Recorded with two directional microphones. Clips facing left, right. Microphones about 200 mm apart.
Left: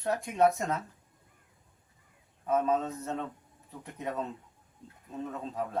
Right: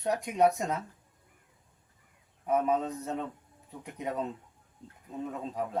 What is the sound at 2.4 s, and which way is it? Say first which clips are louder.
Speech: even; 15° right (ahead or behind).